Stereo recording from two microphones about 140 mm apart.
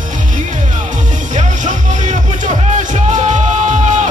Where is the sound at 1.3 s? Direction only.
60° right (ahead or behind).